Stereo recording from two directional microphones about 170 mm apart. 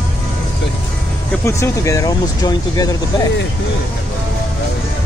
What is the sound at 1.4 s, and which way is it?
Speech, 15° left (ahead or behind).